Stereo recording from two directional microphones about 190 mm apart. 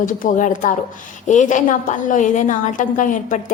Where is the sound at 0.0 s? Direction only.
45° left (ahead or behind).